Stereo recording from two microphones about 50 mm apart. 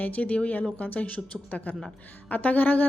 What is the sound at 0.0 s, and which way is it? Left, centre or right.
A woman's voice, left.